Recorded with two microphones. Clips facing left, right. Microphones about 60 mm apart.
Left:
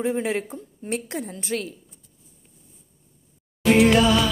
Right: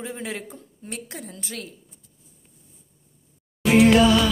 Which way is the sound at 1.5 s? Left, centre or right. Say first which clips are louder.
Left 9 dB; left.